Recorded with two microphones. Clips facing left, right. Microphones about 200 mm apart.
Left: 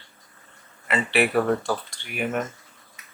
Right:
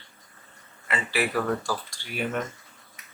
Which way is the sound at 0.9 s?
25° left (ahead or behind).